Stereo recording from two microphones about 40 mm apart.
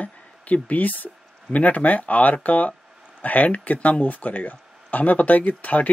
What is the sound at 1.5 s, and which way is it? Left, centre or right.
Speech, left.